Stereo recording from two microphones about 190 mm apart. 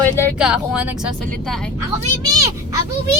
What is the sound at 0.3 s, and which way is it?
Speech, 5° right (ahead or behind).